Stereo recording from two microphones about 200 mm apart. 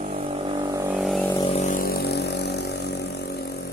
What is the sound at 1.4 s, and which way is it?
Vehicle, 35° left (ahead or behind).